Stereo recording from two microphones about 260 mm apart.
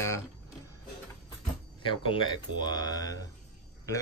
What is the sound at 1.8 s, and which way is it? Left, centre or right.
Speech, centre.